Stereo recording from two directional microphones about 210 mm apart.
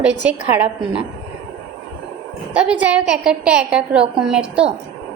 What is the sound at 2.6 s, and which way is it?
A woman's voice, 5° right (ahead or behind).